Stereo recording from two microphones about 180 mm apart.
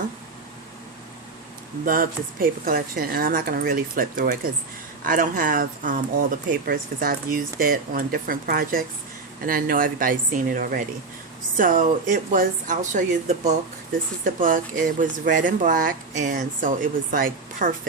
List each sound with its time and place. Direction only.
1.8 s speech: 50° right (ahead or behind)